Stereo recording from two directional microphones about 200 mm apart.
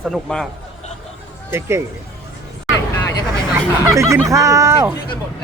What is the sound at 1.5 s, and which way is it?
Speech, 10° right (ahead or behind).